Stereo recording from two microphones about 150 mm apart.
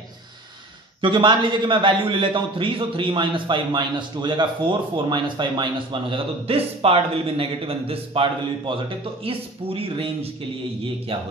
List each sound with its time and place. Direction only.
1.0 s a man's voice: 35° right (ahead or behind)